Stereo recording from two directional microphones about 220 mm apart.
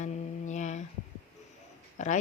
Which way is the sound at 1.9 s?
35° left (ahead or behind).